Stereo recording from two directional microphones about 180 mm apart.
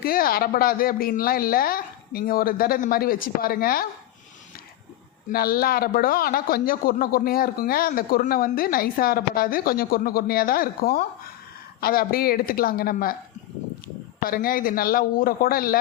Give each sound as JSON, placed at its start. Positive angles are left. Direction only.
{"t": 0.0, "sound": "speech", "side_deg": 55}
{"t": 5.3, "sound": "speech", "side_deg": 55}
{"t": 14.2, "sound": "a man's voice", "side_deg": 55}